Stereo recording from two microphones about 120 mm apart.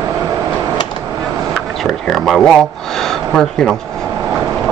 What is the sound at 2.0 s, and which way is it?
Speech, centre (ahead or behind).